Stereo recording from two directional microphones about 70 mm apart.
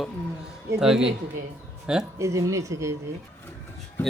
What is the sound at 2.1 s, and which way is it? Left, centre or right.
Speech, right.